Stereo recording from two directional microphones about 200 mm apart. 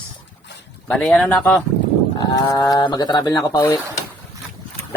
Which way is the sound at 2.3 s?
20° left (ahead or behind).